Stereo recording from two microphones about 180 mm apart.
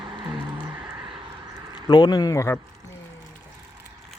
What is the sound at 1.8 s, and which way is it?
Speech, 25° left (ahead or behind).